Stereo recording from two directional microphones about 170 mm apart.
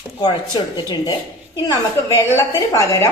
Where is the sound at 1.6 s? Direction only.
20° left (ahead or behind).